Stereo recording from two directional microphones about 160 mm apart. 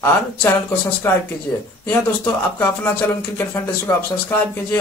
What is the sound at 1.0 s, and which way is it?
Speech, 15° left (ahead or behind).